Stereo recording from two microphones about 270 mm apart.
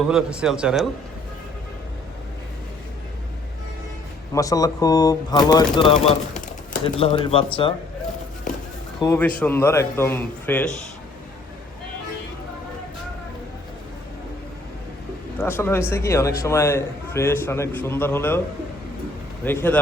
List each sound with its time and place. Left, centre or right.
0.0 s speech: centre
4.4 s a man's voice: centre
9.0 s a man's voice: centre
15.4 s a man's voice: centre
19.5 s a man's voice: centre